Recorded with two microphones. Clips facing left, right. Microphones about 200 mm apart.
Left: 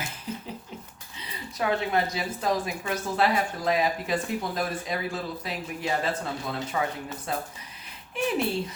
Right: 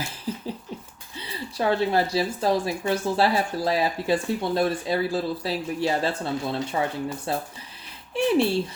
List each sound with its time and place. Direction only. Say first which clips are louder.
1.1 s speech: right 6 dB; 30° right (ahead or behind)